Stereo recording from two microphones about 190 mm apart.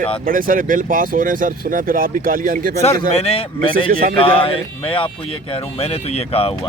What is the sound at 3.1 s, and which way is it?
Speech, 30° left (ahead or behind).